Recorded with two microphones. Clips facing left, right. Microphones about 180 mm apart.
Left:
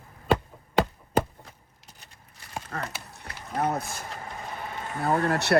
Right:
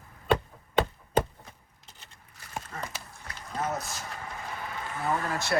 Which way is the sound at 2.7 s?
65° left (ahead or behind).